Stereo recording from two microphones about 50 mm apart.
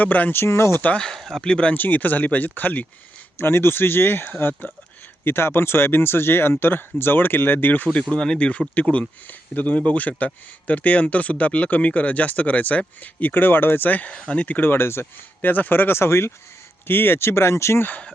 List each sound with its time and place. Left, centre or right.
0.0 s speech: left
0.3 s speech: left
0.9 s speech: centre
1.4 s speech: centre
1.8 s speech: left
3.3 s speech: left
8.1 s speech: centre
14.7 s speech: left
15.4 s speech: left